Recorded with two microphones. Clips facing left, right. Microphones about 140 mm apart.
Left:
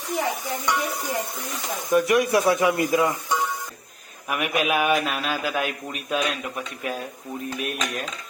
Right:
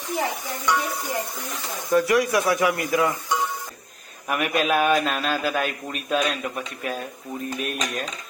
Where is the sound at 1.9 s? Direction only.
20° left (ahead or behind).